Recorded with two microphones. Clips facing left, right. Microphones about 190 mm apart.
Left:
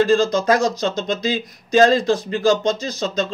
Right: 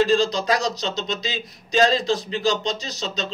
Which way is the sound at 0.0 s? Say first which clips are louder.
Left 3 dB; 50° left (ahead or behind).